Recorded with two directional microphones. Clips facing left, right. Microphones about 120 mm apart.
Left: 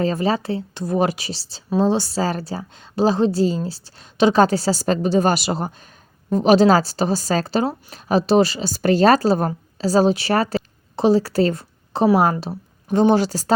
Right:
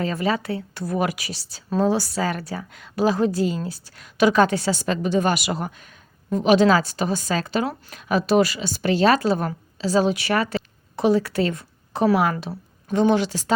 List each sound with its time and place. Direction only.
0.0 s a woman's voice: 30° left (ahead or behind)